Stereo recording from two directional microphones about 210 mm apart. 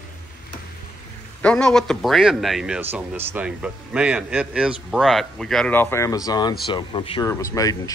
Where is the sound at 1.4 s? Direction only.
5° left (ahead or behind).